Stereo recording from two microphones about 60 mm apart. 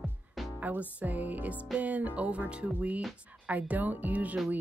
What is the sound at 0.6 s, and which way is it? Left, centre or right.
Music, right.